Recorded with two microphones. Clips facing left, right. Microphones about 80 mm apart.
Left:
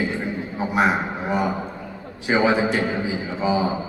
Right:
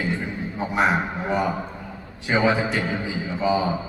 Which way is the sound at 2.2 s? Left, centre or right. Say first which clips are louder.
Left 2 dB; centre.